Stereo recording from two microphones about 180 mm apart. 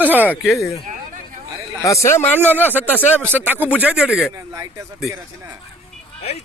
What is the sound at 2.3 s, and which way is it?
Speech, 10° right (ahead or behind).